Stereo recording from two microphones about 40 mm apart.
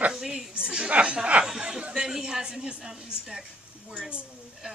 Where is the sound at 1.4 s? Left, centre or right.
Centre.